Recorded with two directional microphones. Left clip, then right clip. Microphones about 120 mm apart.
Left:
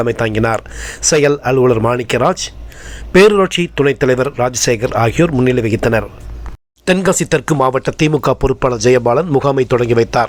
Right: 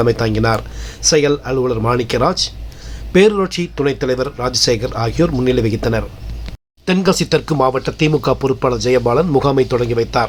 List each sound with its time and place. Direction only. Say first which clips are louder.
0.0 s speech: even; 30° left (ahead or behind)